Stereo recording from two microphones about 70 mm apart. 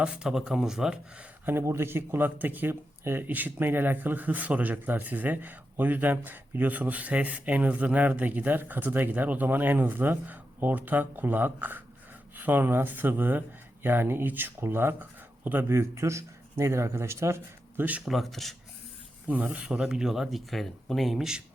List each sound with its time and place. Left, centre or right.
0.0 s speech: centre
1.5 s speech: right
18.0 s speech: centre
19.3 s speech: centre